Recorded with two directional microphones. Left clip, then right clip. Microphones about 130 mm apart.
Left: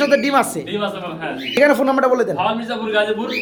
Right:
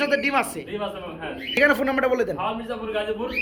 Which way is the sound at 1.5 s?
5° left (ahead or behind).